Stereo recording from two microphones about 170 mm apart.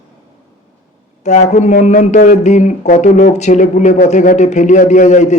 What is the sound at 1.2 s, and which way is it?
Speech, 45° left (ahead or behind).